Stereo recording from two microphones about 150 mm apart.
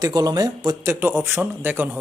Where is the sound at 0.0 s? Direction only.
25° right (ahead or behind).